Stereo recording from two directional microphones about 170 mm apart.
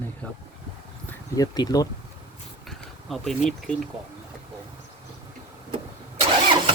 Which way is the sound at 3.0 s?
Centre (ahead or behind).